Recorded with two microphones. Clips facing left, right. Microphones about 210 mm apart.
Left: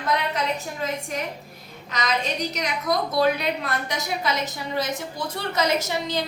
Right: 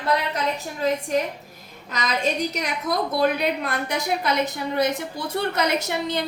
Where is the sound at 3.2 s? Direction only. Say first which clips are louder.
Right 1 dB; 55° right (ahead or behind).